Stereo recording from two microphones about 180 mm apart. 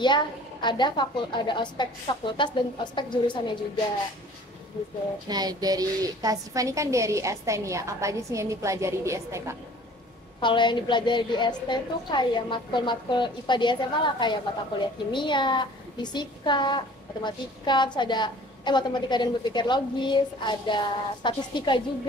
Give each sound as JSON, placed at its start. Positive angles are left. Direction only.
{"t": 0.0, "sound": "a woman's voice", "side_deg": 25}
{"t": 5.3, "sound": "a woman's voice", "side_deg": -20}
{"t": 10.4, "sound": "a woman's voice", "side_deg": 25}